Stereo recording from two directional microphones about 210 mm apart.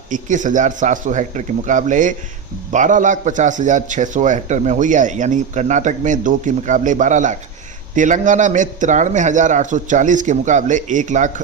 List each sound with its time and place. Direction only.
0.1 s a man's voice: 35° right (ahead or behind)